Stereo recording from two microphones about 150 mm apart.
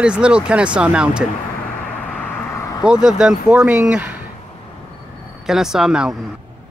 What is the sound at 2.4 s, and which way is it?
Vehicle, 20° left (ahead or behind).